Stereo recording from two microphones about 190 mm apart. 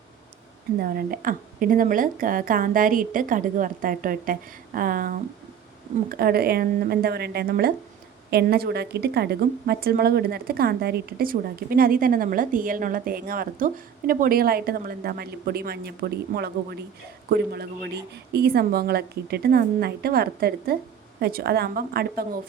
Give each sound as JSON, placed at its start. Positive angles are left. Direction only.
{"t": 0.8, "sound": "a woman's voice", "side_deg": -50}